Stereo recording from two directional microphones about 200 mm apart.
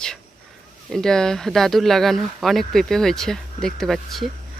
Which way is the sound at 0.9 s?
Centre (ahead or behind).